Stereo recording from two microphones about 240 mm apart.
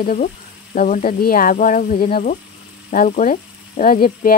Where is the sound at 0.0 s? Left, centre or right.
Left.